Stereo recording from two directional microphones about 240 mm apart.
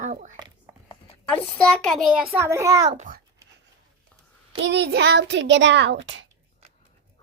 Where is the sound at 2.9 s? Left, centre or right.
Right.